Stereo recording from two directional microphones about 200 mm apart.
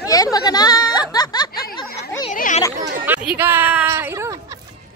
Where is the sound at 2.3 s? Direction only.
40° left (ahead or behind).